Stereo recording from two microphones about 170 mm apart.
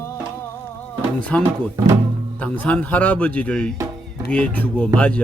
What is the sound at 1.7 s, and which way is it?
Music, 15° right (ahead or behind).